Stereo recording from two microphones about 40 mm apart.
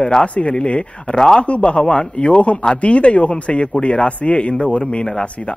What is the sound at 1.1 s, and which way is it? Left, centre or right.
Speech, centre.